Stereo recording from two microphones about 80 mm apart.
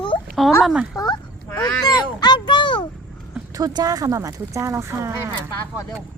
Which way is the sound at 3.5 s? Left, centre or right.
Right.